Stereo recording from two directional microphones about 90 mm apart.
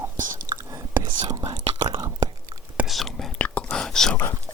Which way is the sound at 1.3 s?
50° right (ahead or behind).